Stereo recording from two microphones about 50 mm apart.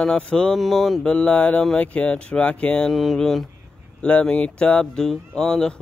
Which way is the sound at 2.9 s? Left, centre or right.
Centre.